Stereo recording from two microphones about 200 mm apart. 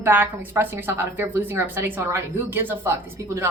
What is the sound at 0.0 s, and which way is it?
A woman's voice, 10° right (ahead or behind).